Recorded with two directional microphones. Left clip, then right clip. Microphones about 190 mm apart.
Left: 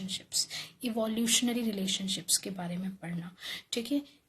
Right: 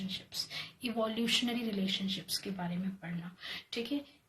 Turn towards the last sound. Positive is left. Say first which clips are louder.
# left 4 dB
turn(degrees=45)  # may be behind; listen again after turning